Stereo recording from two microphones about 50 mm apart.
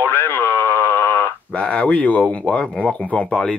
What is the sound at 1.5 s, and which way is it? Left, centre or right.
Speech, left.